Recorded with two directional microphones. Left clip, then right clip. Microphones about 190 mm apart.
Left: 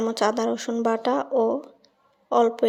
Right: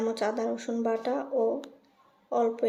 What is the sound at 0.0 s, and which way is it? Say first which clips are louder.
Speech: left 6 dB; 40° left (ahead or behind).